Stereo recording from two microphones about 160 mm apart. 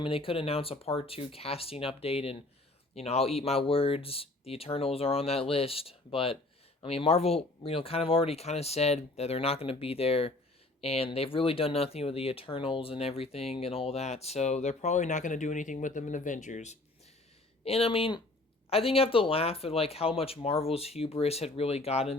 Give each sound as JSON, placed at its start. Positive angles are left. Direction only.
{"t": 0.0, "sound": "speech", "side_deg": 35}
{"t": 17.7, "sound": "speech", "side_deg": 40}